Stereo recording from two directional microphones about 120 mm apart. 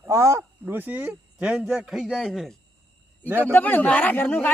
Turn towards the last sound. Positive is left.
turn(degrees=15)  # may be behind; listen again after turning